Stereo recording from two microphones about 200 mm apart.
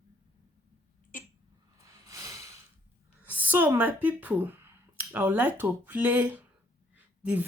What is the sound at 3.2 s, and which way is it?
Speech, 10° right (ahead or behind).